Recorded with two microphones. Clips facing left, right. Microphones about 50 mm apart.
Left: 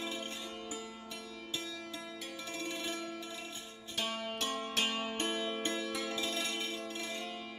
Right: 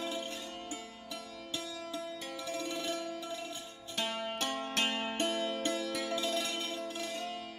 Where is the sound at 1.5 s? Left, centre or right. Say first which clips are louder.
Right 3 dB; left.